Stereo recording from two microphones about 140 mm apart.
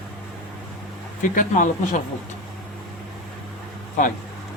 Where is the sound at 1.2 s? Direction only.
65° left (ahead or behind).